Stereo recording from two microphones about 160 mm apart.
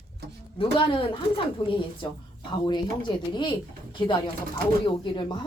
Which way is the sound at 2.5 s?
25° left (ahead or behind).